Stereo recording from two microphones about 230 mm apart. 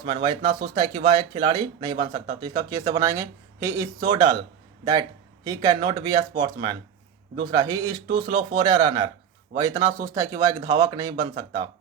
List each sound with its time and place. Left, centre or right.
0.0 s speech: right
5.5 s speech: centre